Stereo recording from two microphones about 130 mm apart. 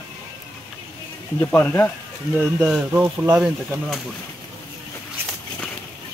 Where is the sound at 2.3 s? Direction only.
15° right (ahead or behind).